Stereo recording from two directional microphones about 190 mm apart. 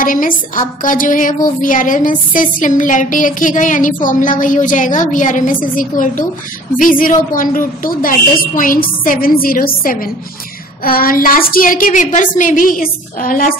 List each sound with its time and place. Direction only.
0.0 s a woman's voice: 45° left (ahead or behind)